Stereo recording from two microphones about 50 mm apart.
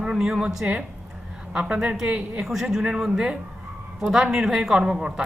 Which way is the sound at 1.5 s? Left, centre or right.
Centre.